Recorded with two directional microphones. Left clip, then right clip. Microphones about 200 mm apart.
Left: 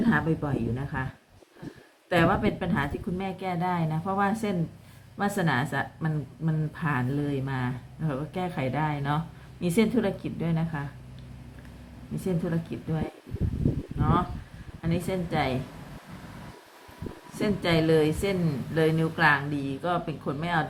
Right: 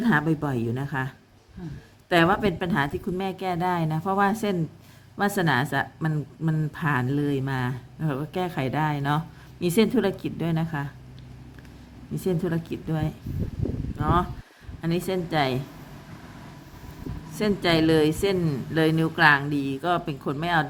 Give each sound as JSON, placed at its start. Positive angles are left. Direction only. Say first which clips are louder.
{"t": 0.0, "sound": "a woman's voice", "louder": "right 3 dB", "side_deg": -55}
{"t": 12.2, "sound": "a woman's voice", "louder": "right 4 dB", "side_deg": -55}
{"t": 17.3, "sound": "a woman's voice", "louder": "right 3 dB", "side_deg": -50}